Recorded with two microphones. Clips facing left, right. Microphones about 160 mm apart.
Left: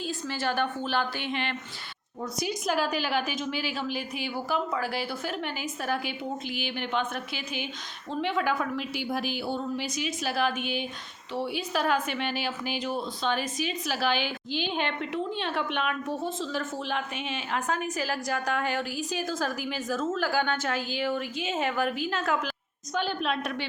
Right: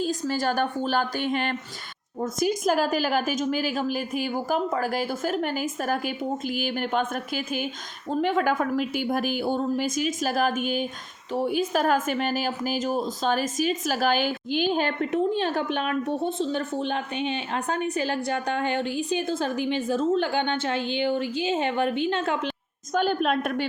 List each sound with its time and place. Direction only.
0.0 s a woman's voice: 40° right (ahead or behind)
23.0 s a woman's voice: 50° right (ahead or behind)